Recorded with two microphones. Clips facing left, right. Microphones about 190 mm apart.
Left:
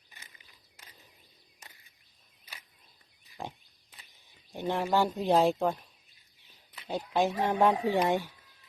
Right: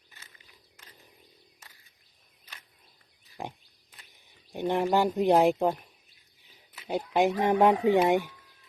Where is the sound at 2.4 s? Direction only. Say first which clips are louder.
Left 1 dB; 10° left (ahead or behind).